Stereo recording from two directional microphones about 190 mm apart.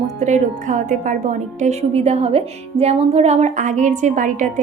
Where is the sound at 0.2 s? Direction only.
40° right (ahead or behind).